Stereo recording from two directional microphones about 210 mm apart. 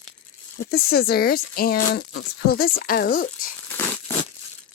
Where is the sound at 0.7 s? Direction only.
50° left (ahead or behind).